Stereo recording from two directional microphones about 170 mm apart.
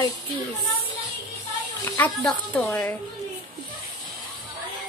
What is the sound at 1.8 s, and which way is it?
Speech, 10° left (ahead or behind).